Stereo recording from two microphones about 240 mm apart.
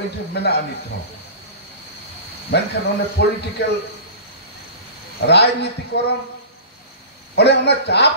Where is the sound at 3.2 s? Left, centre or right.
Left.